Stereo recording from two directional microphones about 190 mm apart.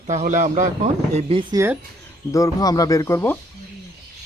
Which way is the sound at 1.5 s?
15° right (ahead or behind).